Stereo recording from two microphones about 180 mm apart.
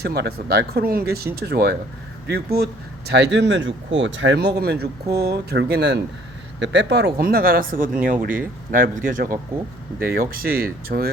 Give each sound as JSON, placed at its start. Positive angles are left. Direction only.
{"t": 0.0, "sound": "speech", "side_deg": -60}
{"t": 3.1, "sound": "speech", "side_deg": -75}